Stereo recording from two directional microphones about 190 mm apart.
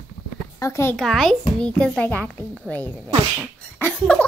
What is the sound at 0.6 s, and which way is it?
Speech, 15° left (ahead or behind).